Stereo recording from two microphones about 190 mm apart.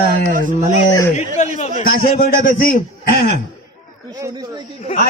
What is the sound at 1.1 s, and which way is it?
Speech, 40° left (ahead or behind).